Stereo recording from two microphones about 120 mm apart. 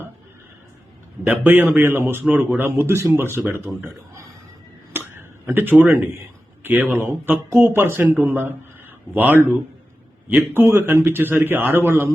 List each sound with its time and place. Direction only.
1.2 s speech: 15° right (ahead or behind)
4.9 s a sound: 20° right (ahead or behind)
6.6 s speech: 15° right (ahead or behind)